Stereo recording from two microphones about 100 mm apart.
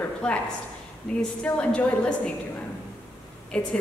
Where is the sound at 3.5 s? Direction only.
10° left (ahead or behind).